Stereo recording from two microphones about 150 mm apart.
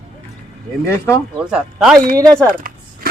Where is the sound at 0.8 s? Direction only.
20° left (ahead or behind).